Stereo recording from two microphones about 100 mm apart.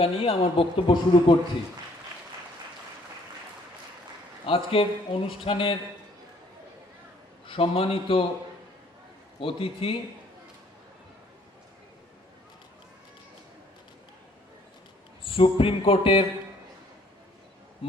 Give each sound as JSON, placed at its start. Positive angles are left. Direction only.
{"t": 0.0, "sound": "speech", "side_deg": 65}
{"t": 4.4, "sound": "speech", "side_deg": 65}
{"t": 7.4, "sound": "speech", "side_deg": 65}
{"t": 9.4, "sound": "speech", "side_deg": 60}
{"t": 15.2, "sound": "speech", "side_deg": 65}